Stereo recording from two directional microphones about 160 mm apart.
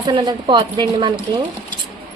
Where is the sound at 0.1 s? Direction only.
30° right (ahead or behind).